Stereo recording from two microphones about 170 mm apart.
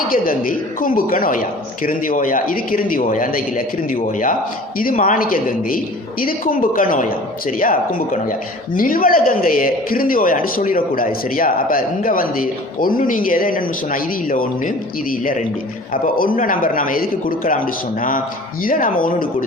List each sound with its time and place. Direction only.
0.1 s a woman's voice: 55° left (ahead or behind)
18.6 s a woman's voice: 55° left (ahead or behind)